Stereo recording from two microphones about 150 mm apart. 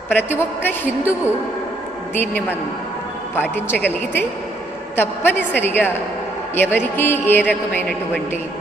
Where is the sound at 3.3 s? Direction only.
10° left (ahead or behind).